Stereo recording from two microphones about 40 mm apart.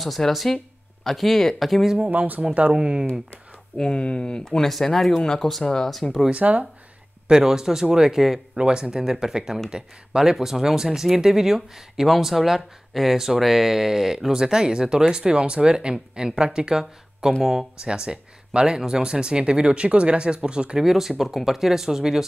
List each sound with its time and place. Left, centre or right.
0.3 s speech: centre
2.0 s speech: right
2.7 s speech: centre
3.7 s speech: left
4.6 s speech: centre
6.3 s speech: right
7.2 s speech: centre
17.8 s speech: right
20.8 s speech: centre